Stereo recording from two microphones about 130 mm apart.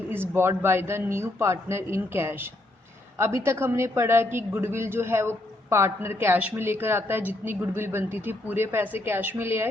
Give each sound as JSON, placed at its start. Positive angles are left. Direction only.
{"t": 0.1, "sound": "a man's voice", "side_deg": -15}